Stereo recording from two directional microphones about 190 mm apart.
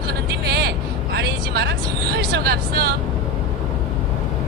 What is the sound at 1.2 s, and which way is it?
Speech, 60° right (ahead or behind).